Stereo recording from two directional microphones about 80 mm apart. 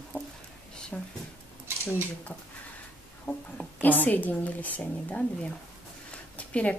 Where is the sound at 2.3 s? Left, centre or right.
Left.